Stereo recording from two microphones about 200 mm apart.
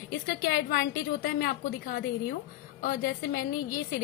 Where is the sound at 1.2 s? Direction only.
50° left (ahead or behind).